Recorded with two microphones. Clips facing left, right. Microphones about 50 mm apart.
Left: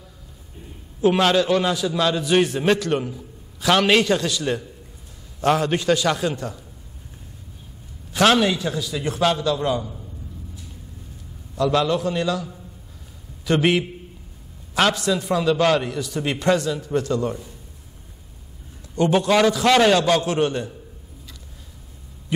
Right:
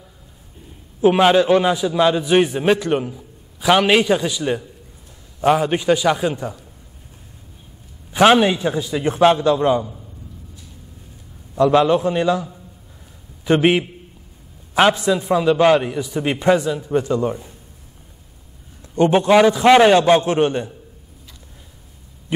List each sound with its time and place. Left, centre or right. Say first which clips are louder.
1.0 s a man's voice: right 4 dB; centre
8.1 s a man's voice: right 4 dB; centre
11.5 s a man's voice: right 6 dB; right
13.5 s a man's voice: right 4 dB; right
18.9 s a man's voice: right 5 dB; right